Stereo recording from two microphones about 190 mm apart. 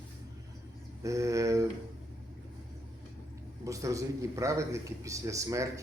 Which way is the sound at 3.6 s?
15° right (ahead or behind).